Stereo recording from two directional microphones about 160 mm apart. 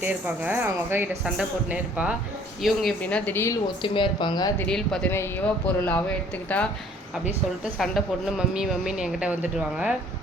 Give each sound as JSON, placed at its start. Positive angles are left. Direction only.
{"t": 0.0, "sound": "a woman's voice", "side_deg": -10}
{"t": 3.8, "sound": "a woman's voice", "side_deg": 30}
{"t": 4.6, "sound": "a woman's voice", "side_deg": 5}